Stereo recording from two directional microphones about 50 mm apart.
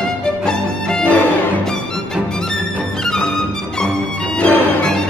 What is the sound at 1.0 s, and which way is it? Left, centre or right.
Music, left.